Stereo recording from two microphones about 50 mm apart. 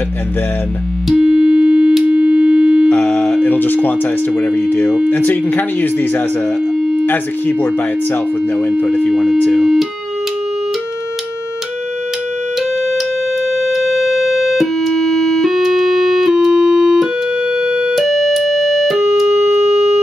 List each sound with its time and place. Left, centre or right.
1.0 s music: centre
3.0 s a sound: centre
3.4 s speech: left
9.1 s speech: centre
13.6 s music: centre
14.8 s music: centre
15.5 s keyboard: centre
17.9 s music: centre